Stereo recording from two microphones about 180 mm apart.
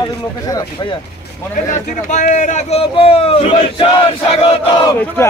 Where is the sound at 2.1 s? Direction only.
45° left (ahead or behind).